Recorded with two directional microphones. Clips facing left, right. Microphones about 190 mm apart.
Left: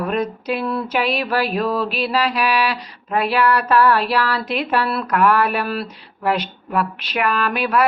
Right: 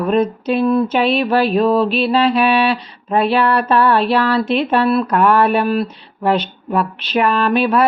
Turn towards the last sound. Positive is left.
turn(degrees=-25)  # may be behind; listen again after turning